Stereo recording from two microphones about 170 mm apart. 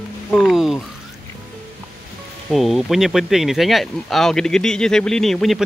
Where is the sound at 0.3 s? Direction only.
Centre (ahead or behind).